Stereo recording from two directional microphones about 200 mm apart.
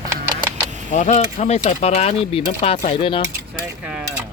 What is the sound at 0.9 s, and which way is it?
Speech, 35° left (ahead or behind).